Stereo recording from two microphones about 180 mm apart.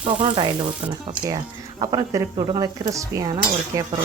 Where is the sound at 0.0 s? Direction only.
25° right (ahead or behind).